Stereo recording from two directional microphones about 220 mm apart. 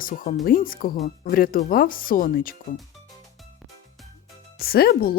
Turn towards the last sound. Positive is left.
turn(degrees=45)  # may be behind; listen again after turning